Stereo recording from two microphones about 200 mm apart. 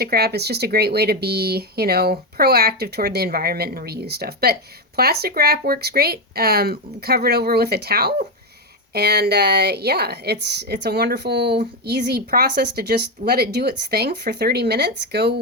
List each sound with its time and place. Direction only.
0.0 s a woman's voice: 55° right (ahead or behind)